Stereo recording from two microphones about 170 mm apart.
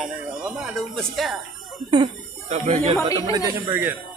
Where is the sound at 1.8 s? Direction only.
30° right (ahead or behind).